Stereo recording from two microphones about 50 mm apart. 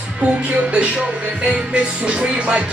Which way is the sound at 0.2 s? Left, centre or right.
Right.